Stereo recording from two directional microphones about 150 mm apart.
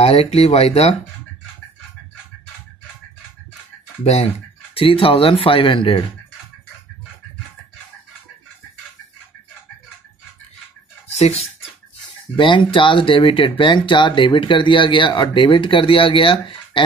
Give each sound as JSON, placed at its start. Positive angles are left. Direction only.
{"t": 0.0, "sound": "speech", "side_deg": 40}
{"t": 4.0, "sound": "speech", "side_deg": 45}
{"t": 11.1, "sound": "speech", "side_deg": 45}
{"t": 12.4, "sound": "speech", "side_deg": 35}